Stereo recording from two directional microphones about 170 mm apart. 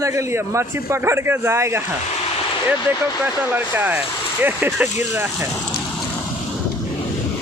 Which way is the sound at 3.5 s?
10° right (ahead or behind).